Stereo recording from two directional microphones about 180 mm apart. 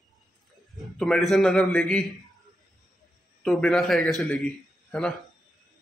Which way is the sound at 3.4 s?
Centre (ahead or behind).